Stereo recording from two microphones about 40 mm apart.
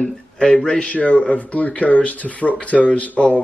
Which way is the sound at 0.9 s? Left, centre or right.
Left.